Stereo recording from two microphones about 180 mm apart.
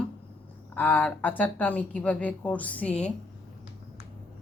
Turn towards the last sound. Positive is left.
turn(degrees=5)  # may be behind; listen again after turning